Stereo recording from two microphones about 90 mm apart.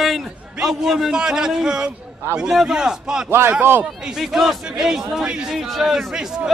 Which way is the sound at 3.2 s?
25° right (ahead or behind).